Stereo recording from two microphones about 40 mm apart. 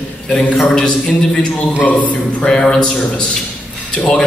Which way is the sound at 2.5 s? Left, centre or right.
Centre.